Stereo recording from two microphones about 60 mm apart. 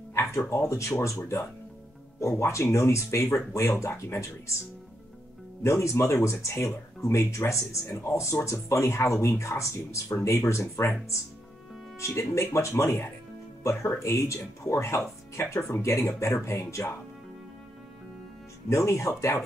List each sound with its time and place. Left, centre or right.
0.1 s a sound: left
0.7 s speech: left
2.1 s speech: left
5.6 s speech: left
12.0 s speech: left
18.7 s speech: left